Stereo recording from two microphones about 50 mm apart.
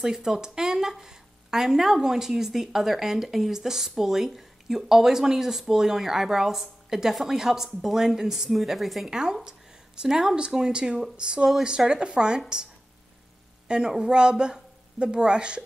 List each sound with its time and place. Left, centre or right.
0.0 s speech: centre
9.1 s speech: centre
13.7 s speech: centre